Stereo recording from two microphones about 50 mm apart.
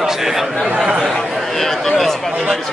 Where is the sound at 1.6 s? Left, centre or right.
Centre.